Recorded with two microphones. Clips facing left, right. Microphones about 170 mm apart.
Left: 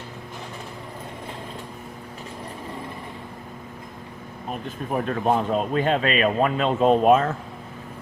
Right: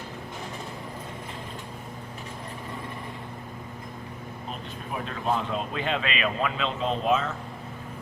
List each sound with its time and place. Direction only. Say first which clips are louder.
4.9 s speech: left 6 dB; 50° left (ahead or behind)